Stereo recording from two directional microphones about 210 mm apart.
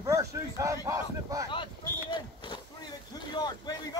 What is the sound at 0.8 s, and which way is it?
Speech, 15° right (ahead or behind).